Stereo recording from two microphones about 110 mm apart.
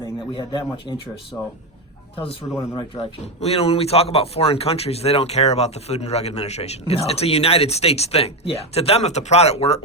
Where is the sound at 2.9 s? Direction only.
70° left (ahead or behind).